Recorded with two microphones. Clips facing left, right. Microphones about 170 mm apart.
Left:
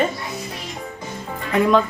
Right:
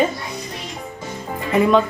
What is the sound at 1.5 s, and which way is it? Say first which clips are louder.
Speech: right 1 dB; centre (ahead or behind).